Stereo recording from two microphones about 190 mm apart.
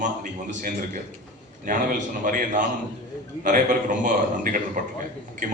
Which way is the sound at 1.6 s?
45° right (ahead or behind).